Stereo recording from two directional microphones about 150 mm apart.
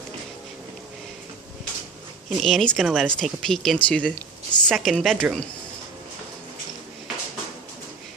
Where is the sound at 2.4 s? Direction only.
Centre (ahead or behind).